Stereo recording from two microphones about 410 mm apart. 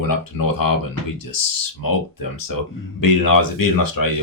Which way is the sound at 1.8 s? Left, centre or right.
Left.